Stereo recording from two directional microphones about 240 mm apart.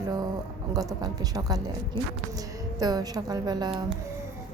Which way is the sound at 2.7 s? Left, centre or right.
Centre.